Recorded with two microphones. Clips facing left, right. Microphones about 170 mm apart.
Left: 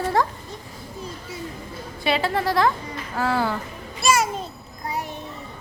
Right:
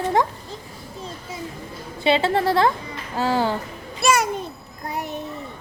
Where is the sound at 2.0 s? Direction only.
25° right (ahead or behind).